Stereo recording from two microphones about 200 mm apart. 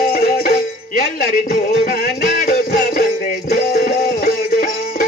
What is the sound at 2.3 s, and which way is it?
Music, 50° left (ahead or behind).